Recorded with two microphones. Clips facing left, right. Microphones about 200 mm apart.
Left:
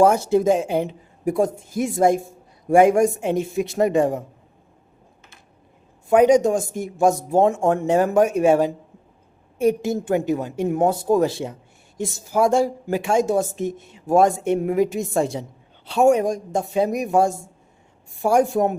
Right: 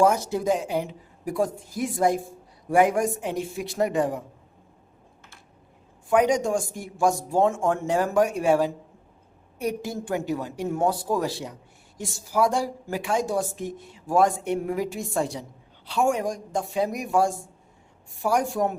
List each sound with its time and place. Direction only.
0.0 s a woman's voice: 30° left (ahead or behind)
6.1 s speech: 25° left (ahead or behind)